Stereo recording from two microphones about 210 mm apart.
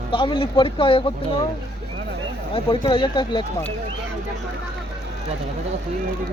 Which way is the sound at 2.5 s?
25° left (ahead or behind).